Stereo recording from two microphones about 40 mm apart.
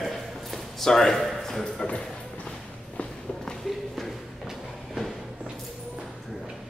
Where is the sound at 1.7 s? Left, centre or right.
Left.